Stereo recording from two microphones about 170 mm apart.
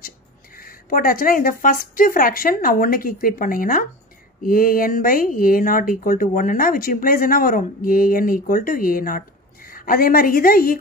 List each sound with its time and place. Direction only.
0.6 s speech: 55° left (ahead or behind)